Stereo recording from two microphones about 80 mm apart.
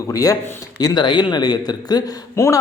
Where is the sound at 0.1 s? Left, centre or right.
Left.